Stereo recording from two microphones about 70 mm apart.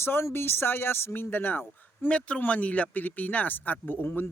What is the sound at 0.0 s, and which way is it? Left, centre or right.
Speech, left.